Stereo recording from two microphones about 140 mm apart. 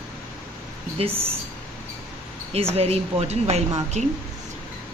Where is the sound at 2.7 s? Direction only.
45° right (ahead or behind).